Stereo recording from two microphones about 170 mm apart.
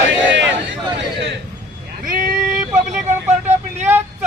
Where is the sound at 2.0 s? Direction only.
55° right (ahead or behind).